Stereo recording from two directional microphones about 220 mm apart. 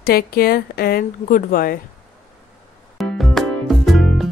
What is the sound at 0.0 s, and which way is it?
A woman's voice, 40° left (ahead or behind).